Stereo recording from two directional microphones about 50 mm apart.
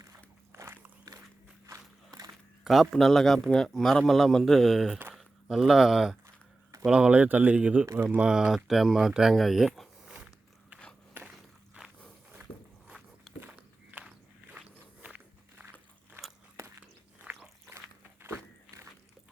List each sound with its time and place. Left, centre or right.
0.5 s biting: right
2.9 s speech: centre
6.2 s a sound: right
6.8 s speech: centre
8.2 s speech: centre
10.2 s biting: right
11.8 s walk: right
13.3 s walk: centre
13.9 s walk: right
17.3 s biting: right
18.2 s biting: right